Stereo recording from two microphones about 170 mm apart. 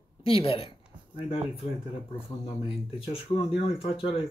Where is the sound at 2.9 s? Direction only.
35° left (ahead or behind).